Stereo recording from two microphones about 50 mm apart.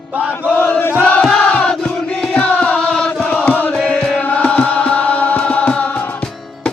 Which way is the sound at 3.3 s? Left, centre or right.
Left.